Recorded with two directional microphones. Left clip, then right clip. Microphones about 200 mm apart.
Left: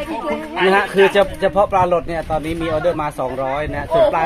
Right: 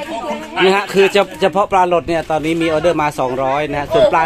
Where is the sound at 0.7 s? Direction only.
35° right (ahead or behind).